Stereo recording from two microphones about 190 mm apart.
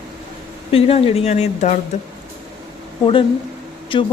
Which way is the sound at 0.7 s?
30° left (ahead or behind).